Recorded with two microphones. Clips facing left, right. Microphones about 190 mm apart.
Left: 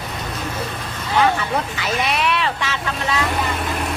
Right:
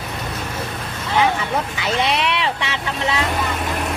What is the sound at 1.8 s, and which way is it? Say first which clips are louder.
Speech: right 3 dB; 25° right (ahead or behind).